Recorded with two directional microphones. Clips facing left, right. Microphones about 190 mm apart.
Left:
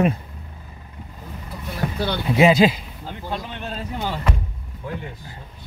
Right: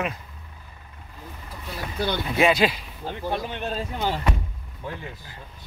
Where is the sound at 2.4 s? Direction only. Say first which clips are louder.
Left 5 dB; 20° left (ahead or behind).